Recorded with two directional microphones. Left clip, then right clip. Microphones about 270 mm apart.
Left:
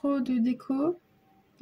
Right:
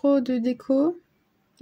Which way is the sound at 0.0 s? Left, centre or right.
Right.